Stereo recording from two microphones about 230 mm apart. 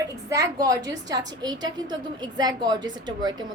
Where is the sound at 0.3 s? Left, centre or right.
Centre.